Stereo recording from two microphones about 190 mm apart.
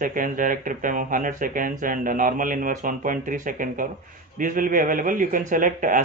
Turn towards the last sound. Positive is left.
turn(degrees=-45)  # may be behind; listen again after turning